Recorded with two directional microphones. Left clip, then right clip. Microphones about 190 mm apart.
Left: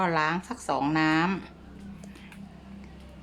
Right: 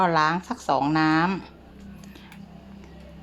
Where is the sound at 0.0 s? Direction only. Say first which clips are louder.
Right 5 dB; 25° right (ahead or behind).